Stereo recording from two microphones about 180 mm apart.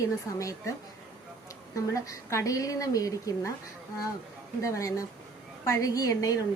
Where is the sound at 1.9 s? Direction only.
15° left (ahead or behind).